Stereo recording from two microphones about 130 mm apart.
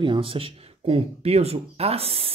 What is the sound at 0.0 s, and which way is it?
Speech, 40° right (ahead or behind).